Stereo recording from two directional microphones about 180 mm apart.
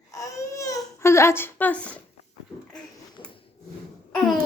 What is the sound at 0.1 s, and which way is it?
Baby cry, 20° left (ahead or behind).